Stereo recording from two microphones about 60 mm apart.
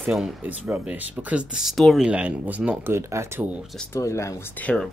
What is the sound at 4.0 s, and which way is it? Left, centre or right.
Speech, left.